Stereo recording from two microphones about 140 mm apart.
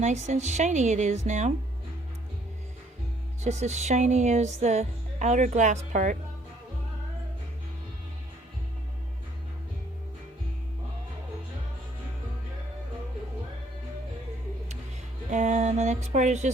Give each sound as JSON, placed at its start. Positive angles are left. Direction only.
{"t": 0.0, "sound": "music", "side_deg": -55}
{"t": 3.4, "sound": "music", "side_deg": -55}
{"t": 15.3, "sound": "a sound", "side_deg": -60}